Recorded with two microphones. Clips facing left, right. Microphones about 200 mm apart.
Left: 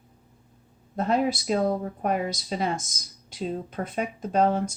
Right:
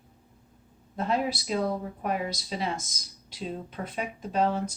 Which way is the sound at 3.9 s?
45° left (ahead or behind).